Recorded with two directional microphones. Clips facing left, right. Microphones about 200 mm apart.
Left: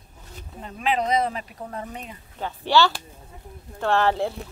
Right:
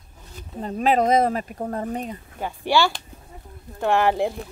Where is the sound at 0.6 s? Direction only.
40° right (ahead or behind).